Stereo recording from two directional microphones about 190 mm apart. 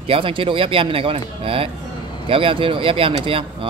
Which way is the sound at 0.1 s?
30° right (ahead or behind).